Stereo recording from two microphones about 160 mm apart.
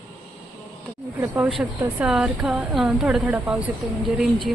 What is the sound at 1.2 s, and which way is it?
Speech, 20° right (ahead or behind).